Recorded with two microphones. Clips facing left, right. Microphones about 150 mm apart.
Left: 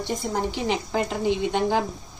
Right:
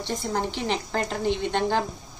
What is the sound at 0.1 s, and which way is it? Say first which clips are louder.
A woman's voice: even; centre (ahead or behind).